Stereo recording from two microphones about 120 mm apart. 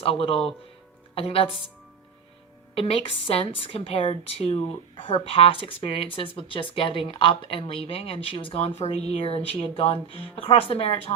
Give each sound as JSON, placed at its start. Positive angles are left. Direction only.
{"t": 0.0, "sound": "a woman's voice", "side_deg": 55}
{"t": 2.7, "sound": "speech", "side_deg": 55}